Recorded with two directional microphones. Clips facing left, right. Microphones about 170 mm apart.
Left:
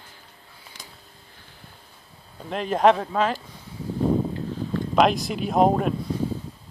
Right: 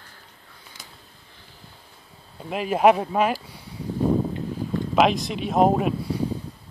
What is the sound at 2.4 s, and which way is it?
Speech, 5° right (ahead or behind).